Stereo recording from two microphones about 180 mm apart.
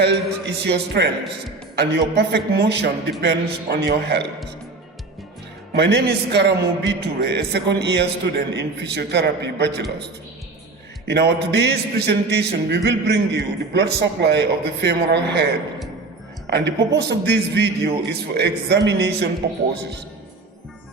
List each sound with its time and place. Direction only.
0.0 s a man's voice: 65° right (ahead or behind)
5.7 s a man's voice: 70° right (ahead or behind)
11.1 s a man's voice: 70° right (ahead or behind)
16.5 s a woman's voice: 70° right (ahead or behind)